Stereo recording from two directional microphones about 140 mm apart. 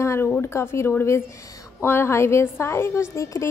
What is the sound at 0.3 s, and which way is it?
A woman's voice, 20° left (ahead or behind).